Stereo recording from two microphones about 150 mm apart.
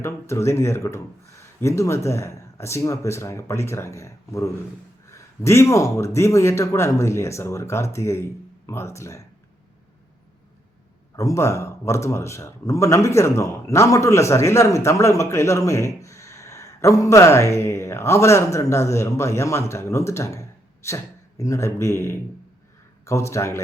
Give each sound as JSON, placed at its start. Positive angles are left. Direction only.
{"t": 0.0, "sound": "a man's voice", "side_deg": 20}
{"t": 11.2, "sound": "a man's voice", "side_deg": 20}